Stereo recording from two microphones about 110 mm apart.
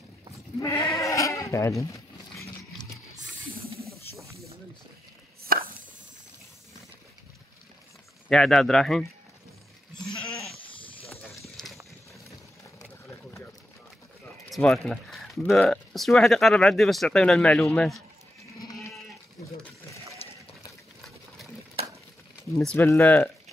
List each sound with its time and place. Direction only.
0.6 s goat: 30° left (ahead or behind)
1.8 s a sound: 30° left (ahead or behind)
8.3 s speech: 5° left (ahead or behind)
10.7 s snake: 50° left (ahead or behind)
11.4 s clip-clop: centre (ahead or behind)
14.5 s speech: centre (ahead or behind)
18.6 s sheep: 30° left (ahead or behind)
20.2 s water: 65° left (ahead or behind)
22.8 s speech: 25° left (ahead or behind)